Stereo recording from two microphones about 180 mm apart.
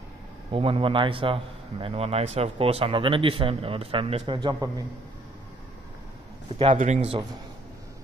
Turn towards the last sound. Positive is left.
turn(degrees=-35)  # may be behind; listen again after turning